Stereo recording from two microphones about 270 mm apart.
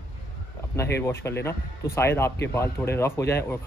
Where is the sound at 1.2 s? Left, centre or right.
Centre.